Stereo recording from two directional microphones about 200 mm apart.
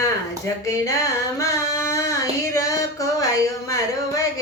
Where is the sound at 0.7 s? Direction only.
15° left (ahead or behind).